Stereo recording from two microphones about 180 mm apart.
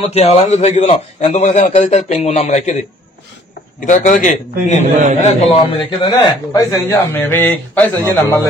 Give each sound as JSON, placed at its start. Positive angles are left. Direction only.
{"t": 0.0, "sound": "a man's voice", "side_deg": 35}
{"t": 3.8, "sound": "a man's voice", "side_deg": 45}
{"t": 4.9, "sound": "a man's voice", "side_deg": -40}
{"t": 5.2, "sound": "a man's voice", "side_deg": 35}
{"t": 5.6, "sound": "a man's voice", "side_deg": 25}